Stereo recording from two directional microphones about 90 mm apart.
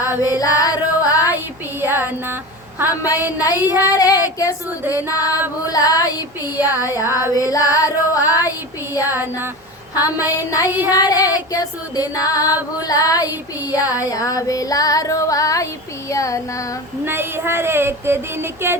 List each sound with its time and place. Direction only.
0.2 s singing: 40° left (ahead or behind)
1.8 s speech: 20° right (ahead or behind)
2.9 s child singing: 40° left (ahead or behind)
3.3 s female singing: 40° left (ahead or behind)
4.9 s child singing: 40° left (ahead or behind)
5.6 s female singing: 45° left (ahead or behind)
6.7 s child singing: 40° left (ahead or behind)
8.4 s speech: 25° right (ahead or behind)
10.2 s child singing: 40° left (ahead or behind)
10.8 s female singing: 45° left (ahead or behind)
13.2 s speech: 20° right (ahead or behind)
14.1 s child singing: 40° left (ahead or behind)
17.1 s speech: 25° right (ahead or behind)